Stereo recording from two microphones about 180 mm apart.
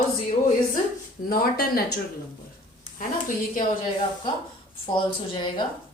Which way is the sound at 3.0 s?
45° left (ahead or behind).